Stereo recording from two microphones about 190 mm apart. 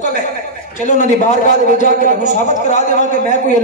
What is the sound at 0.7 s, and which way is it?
A man's voice, 40° left (ahead or behind).